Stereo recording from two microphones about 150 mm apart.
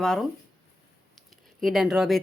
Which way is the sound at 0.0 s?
5° left (ahead or behind).